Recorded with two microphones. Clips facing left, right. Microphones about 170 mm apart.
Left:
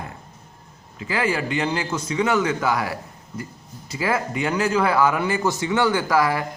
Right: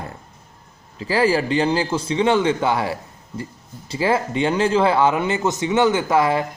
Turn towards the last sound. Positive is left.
turn(degrees=-25)  # may be behind; listen again after turning